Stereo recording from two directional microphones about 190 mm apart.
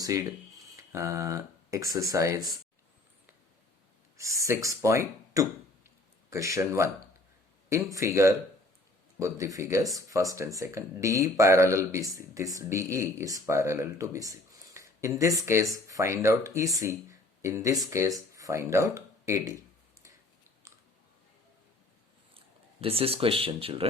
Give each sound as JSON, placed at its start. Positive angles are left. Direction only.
{"t": 0.0, "sound": "speech", "side_deg": -20}
{"t": 4.2, "sound": "speech", "side_deg": -15}
{"t": 20.6, "sound": "clicking", "side_deg": -15}
{"t": 22.4, "sound": "speech", "side_deg": -30}